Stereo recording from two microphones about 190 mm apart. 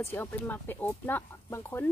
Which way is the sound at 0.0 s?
10° left (ahead or behind).